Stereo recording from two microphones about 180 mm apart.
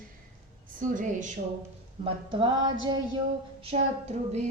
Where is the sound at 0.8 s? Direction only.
45° right (ahead or behind).